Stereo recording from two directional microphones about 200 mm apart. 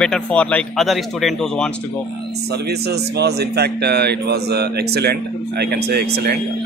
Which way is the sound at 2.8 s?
55° right (ahead or behind).